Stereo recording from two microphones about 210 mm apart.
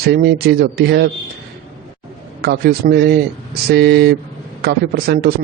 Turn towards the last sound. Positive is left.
turn(degrees=-50)  # may be behind; listen again after turning